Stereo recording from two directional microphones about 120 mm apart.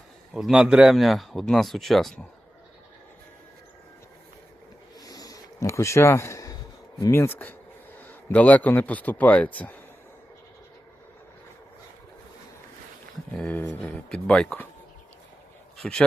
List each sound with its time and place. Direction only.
0.3 s speech: 5° right (ahead or behind)
4.9 s a sound: 30° left (ahead or behind)
7.0 s a man's voice: 20° left (ahead or behind)
13.3 s a man's voice: 10° left (ahead or behind)
15.8 s a man's voice: 10° left (ahead or behind)